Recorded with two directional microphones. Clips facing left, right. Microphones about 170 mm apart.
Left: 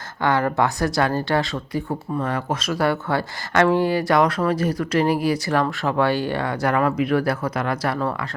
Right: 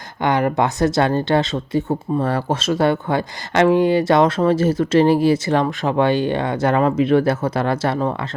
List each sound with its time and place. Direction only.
0.2 s speech: 20° right (ahead or behind)